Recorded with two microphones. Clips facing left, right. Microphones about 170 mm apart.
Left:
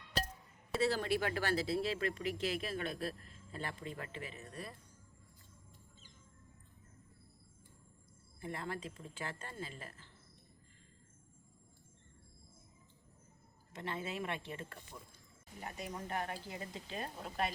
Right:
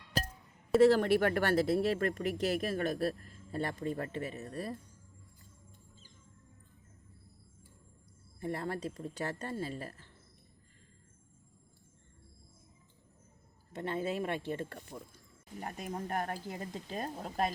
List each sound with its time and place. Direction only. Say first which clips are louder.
0.8 s speech: right 9 dB; 55° right (ahead or behind); by 4.8 s 40° right (ahead or behind)
8.4 s speech: right 6 dB; 40° right (ahead or behind)
13.8 s speech: right 6 dB; 40° right (ahead or behind)